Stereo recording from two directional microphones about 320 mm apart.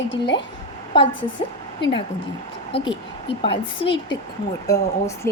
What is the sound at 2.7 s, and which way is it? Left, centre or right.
Speech, centre.